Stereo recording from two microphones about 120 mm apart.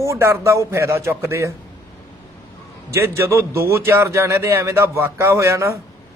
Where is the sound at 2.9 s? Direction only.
20° right (ahead or behind).